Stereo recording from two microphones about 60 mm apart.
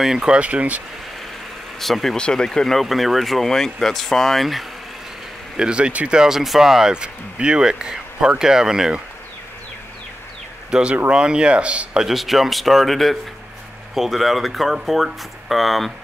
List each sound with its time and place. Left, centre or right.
0.0 s speech: centre
0.4 s speech: right
1.8 s speech: centre
5.6 s speech: centre
10.7 s speech: centre
12.0 s speech: centre